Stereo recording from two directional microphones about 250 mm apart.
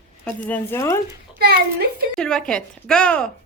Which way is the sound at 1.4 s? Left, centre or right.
Right.